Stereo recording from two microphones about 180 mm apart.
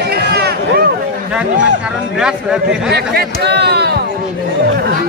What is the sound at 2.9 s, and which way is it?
Speech, 60° right (ahead or behind).